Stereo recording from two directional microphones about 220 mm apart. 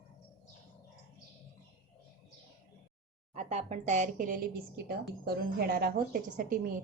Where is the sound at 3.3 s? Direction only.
30° right (ahead or behind).